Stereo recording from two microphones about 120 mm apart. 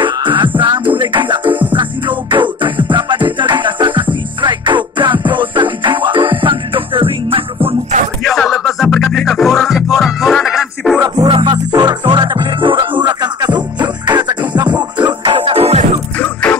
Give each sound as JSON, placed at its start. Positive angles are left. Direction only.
{"t": 0.0, "sound": "music", "side_deg": -40}
{"t": 8.2, "sound": "music", "side_deg": 0}
{"t": 11.2, "sound": "music", "side_deg": -45}
{"t": 11.5, "sound": "music", "side_deg": -35}